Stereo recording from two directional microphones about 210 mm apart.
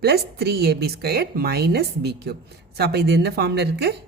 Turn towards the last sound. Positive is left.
turn(degrees=-50)  # may be behind; listen again after turning